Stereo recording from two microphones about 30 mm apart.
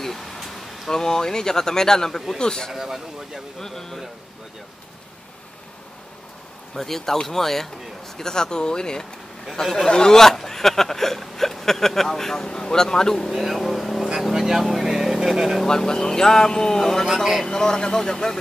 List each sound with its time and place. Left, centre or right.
0.4 s speech: centre
2.7 s a man's voice: centre
3.5 s speech: centre
6.7 s speech: centre
8.2 s speech: left
9.6 s speech: centre
9.8 s speech: left
12.4 s speech: left
13.3 s speech: centre
14.2 s speech: centre
15.6 s speech: centre
17.0 s a man's voice: centre
17.5 s speech: left